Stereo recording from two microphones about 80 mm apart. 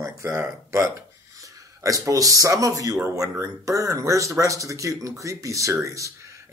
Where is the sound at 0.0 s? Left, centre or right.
Right.